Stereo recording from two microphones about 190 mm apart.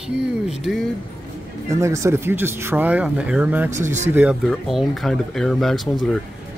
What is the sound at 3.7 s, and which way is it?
Speech, 40° right (ahead or behind).